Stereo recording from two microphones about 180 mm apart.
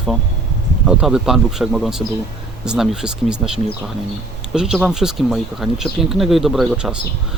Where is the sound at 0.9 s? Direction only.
5° right (ahead or behind).